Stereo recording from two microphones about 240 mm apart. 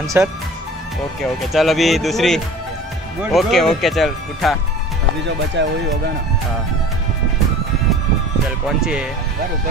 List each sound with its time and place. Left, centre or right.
0.0 s speech: centre
1.4 s speech: centre
5.6 s speech: right
8.6 s speech: centre